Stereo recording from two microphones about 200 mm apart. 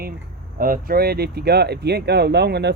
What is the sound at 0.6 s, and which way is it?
Speech, 45° right (ahead or behind).